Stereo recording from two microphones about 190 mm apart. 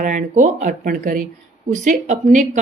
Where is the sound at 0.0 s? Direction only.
40° right (ahead or behind).